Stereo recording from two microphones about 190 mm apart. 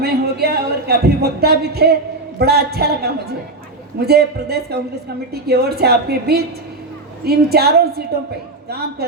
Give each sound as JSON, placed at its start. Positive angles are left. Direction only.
{"t": 0.0, "sound": "a woman's voice", "side_deg": -55}